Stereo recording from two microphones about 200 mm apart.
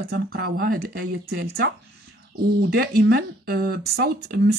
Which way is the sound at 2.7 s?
50° right (ahead or behind).